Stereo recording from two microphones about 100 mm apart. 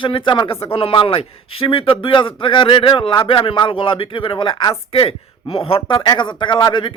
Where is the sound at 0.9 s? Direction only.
65° left (ahead or behind).